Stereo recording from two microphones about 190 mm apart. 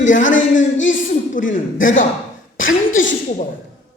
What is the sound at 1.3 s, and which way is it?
Speech, 40° left (ahead or behind).